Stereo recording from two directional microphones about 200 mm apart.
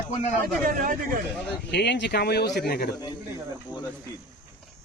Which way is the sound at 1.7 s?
60° left (ahead or behind).